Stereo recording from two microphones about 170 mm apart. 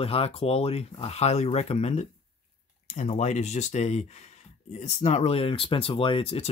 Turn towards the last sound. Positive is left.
turn(degrees=30)  # may be behind; listen again after turning